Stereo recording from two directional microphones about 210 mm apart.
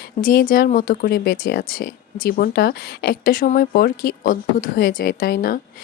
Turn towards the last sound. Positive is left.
turn(degrees=45)  # may be behind; listen again after turning